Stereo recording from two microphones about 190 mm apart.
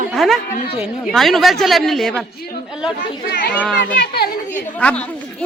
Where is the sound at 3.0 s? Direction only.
50° left (ahead or behind).